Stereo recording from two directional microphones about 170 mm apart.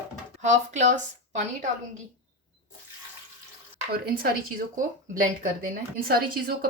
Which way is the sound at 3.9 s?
65° right (ahead or behind).